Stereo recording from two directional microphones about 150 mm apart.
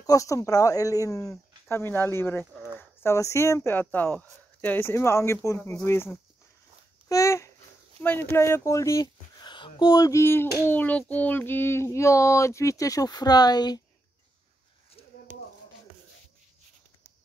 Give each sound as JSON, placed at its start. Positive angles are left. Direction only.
{"t": 0.0, "sound": "speech", "side_deg": 20}